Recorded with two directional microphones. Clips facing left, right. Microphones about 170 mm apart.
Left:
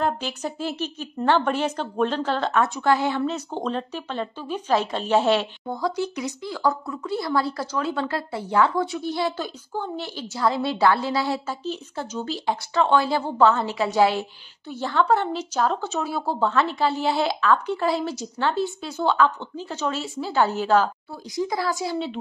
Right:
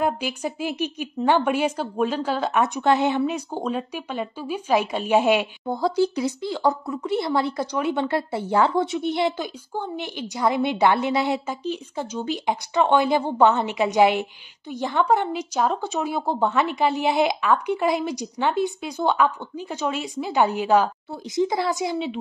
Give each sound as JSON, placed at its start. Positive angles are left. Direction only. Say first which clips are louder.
{"t": 0.0, "sound": "speech", "louder": "right 1 dB", "side_deg": -10}
{"t": 5.7, "sound": "speech", "louder": "right 6 dB", "side_deg": -30}
{"t": 21.4, "sound": "speech", "louder": "right 3 dB", "side_deg": -25}